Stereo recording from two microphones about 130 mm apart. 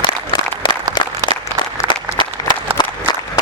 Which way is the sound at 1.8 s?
35° left (ahead or behind).